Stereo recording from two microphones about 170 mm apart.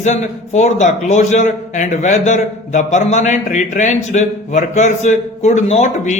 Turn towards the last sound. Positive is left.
turn(degrees=45)  # may be behind; listen again after turning